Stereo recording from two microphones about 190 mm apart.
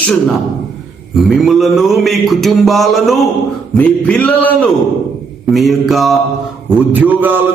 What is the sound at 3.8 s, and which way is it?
Speech, 10° left (ahead or behind).